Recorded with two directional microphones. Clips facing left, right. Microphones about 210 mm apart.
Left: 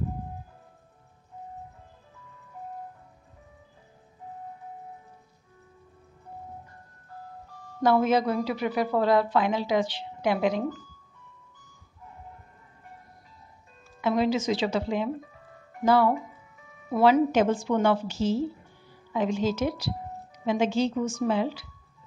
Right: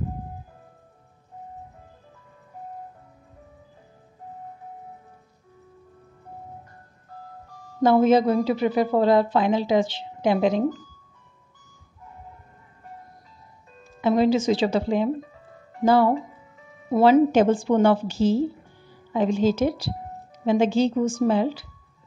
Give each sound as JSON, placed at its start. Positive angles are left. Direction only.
{"t": 7.8, "sound": "a woman's voice", "side_deg": -25}
{"t": 14.0, "sound": "a woman's voice", "side_deg": -30}